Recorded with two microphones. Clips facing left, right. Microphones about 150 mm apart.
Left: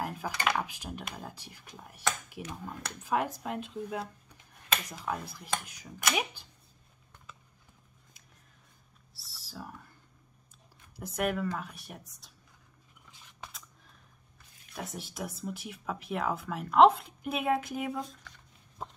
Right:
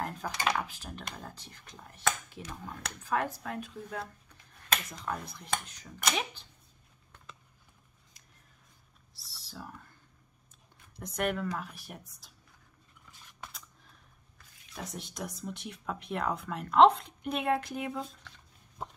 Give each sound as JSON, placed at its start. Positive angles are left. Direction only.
{"t": 0.0, "sound": "dishes", "side_deg": 10}
{"t": 0.5, "sound": "speech", "side_deg": 15}
{"t": 9.1, "sound": "a sound", "side_deg": 0}
{"t": 11.0, "sound": "speech", "side_deg": 5}
{"t": 13.4, "sound": "a sound", "side_deg": 0}
{"t": 14.8, "sound": "speech", "side_deg": 5}